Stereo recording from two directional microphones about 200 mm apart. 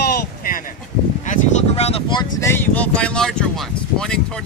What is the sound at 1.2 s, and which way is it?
Speech, 35° left (ahead or behind).